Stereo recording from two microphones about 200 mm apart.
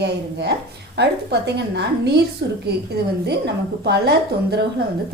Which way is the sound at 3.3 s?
55° right (ahead or behind).